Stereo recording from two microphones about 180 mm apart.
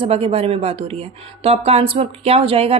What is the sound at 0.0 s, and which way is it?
Speech, 30° right (ahead or behind).